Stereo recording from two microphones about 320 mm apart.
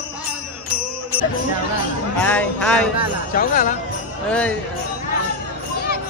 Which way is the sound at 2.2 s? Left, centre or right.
Centre.